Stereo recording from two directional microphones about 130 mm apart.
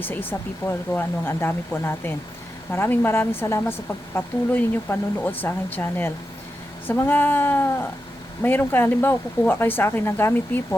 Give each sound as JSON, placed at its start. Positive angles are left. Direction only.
{"t": 0.0, "sound": "a woman's voice", "side_deg": 15}